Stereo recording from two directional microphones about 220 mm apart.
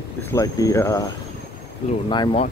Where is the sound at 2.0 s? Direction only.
20° left (ahead or behind).